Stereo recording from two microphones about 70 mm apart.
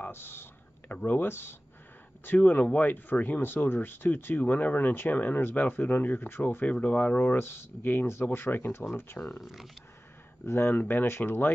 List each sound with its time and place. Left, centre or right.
0.0 s whispering: left
1.0 s speech: left
2.2 s speech: left
6.6 s speech: left
9.4 s speech: centre
10.4 s speech: left
10.7 s speech: left